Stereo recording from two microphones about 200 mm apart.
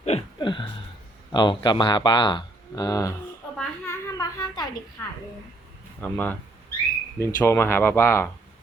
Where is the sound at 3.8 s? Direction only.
15° left (ahead or behind).